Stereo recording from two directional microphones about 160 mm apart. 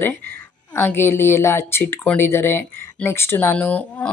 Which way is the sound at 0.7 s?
15° left (ahead or behind).